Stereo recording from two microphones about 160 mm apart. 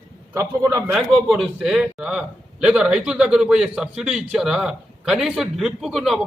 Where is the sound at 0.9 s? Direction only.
Centre (ahead or behind).